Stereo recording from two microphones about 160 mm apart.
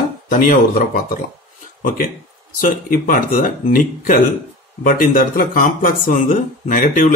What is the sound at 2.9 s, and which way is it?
Speech, 60° left (ahead or behind).